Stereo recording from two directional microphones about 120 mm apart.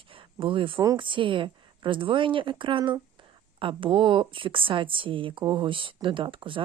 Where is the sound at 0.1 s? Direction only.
45° right (ahead or behind).